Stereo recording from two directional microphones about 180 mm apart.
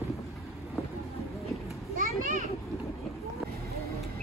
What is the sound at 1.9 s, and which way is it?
Children playing, 45° right (ahead or behind).